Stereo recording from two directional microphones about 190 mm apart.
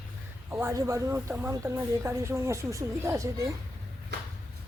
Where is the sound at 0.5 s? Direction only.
15° right (ahead or behind).